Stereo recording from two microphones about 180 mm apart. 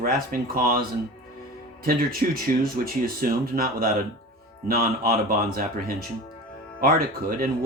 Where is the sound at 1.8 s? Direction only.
55° right (ahead or behind).